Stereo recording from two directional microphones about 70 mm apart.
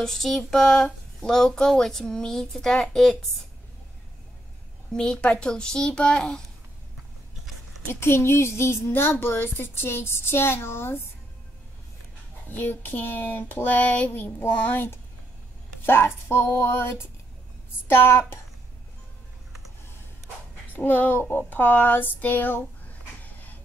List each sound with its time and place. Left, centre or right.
0.0 s a child's voice: centre
4.9 s a child's voice: centre
7.9 s a child's voice: left
12.4 s a sound: left
15.8 s a child's voice: left
20.7 s a sound: left